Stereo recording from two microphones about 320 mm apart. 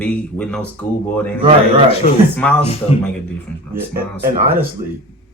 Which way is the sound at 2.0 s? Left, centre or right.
Left.